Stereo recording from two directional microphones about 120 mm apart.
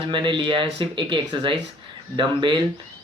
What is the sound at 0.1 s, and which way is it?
Speech, 45° right (ahead or behind).